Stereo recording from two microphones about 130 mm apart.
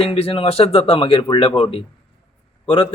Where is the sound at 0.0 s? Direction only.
50° left (ahead or behind).